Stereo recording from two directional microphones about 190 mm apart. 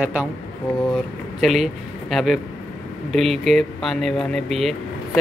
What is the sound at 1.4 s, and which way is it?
Speech, centre (ahead or behind).